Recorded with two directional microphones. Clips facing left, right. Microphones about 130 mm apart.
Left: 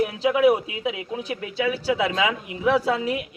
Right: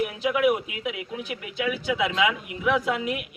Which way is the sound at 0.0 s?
30° left (ahead or behind).